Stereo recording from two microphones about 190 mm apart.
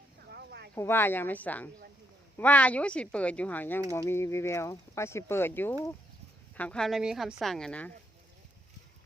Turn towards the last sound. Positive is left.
turn(degrees=5)  # may be behind; listen again after turning